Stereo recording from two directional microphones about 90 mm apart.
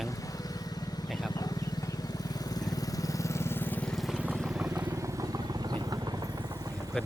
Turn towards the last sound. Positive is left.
turn(degrees=-50)  # may be behind; listen again after turning